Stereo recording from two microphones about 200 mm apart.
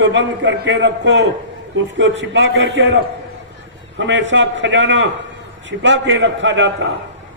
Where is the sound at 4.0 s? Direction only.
65° right (ahead or behind).